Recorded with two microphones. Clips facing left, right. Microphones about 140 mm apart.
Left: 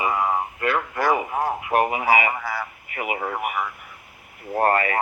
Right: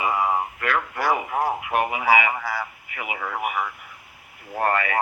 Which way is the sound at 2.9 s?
45° left (ahead or behind).